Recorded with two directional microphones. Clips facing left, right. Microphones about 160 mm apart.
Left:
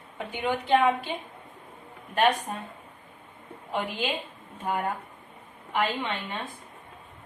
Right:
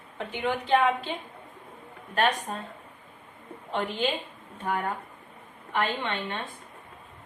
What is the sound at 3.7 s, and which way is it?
A woman's voice, 5° left (ahead or behind).